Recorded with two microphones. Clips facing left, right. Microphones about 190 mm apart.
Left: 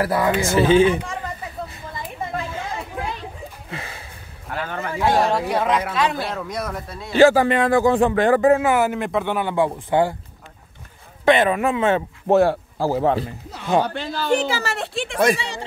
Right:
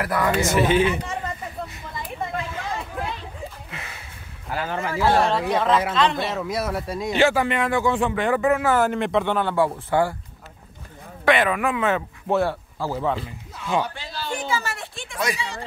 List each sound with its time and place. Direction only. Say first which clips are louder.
0.0 s speech: left 2 dB; 30° left (ahead or behind)
3.7 s a sound: left 5 dB; 30° left (ahead or behind)
4.5 s speech: right 1 dB; 5° right (ahead or behind)
4.9 s speech: left 1 dB; 15° left (ahead or behind); by 7.2 s 10° right (ahead or behind)
7.2 s speech: left 7 dB; 35° left (ahead or behind)
8.6 s speech: left 1 dB; 10° left (ahead or behind)
11.2 s speech: left 3 dB; 25° left (ahead or behind)
12.3 s speech: left 6 dB; 40° left (ahead or behind)
13.5 s speech: right 1 dB; 75° left (ahead or behind)
13.8 s speech: left 9 dB; 60° left (ahead or behind)